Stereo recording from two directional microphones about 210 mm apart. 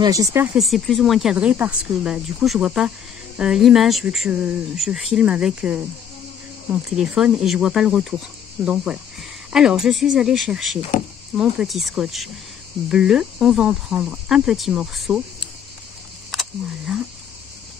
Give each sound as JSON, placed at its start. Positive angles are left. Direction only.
{"t": 0.0, "sound": "speech", "side_deg": -15}
{"t": 0.6, "sound": "cricket", "side_deg": 0}
{"t": 16.3, "sound": "a sound", "side_deg": 0}